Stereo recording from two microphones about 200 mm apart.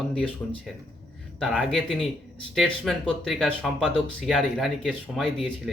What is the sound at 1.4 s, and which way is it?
Speech, centre (ahead or behind).